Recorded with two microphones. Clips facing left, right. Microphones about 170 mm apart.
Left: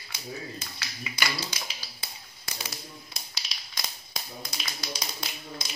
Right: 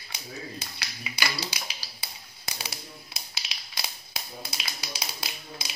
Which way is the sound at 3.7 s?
5° right (ahead or behind).